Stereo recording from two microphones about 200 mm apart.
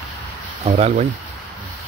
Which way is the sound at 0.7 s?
30° right (ahead or behind).